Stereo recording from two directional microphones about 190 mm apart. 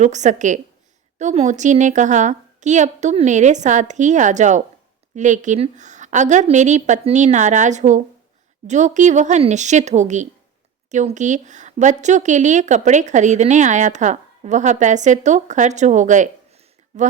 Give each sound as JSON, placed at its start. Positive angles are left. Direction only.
{"t": 0.0, "sound": "a woman's voice", "side_deg": -40}